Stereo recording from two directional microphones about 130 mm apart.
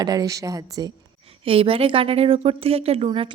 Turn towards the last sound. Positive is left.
turn(degrees=-50)  # may be behind; listen again after turning